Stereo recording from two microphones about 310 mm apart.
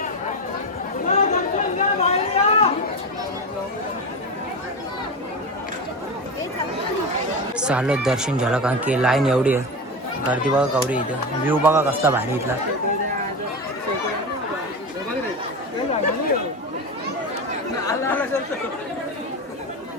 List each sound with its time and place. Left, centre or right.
1.0 s chatter: left
7.6 s a man's voice: centre
17.8 s chatter: centre